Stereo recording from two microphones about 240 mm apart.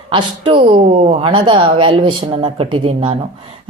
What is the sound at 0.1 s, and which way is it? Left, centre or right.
A woman's voice, right.